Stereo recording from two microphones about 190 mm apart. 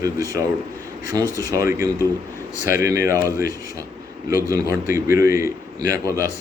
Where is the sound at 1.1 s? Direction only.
20° right (ahead or behind).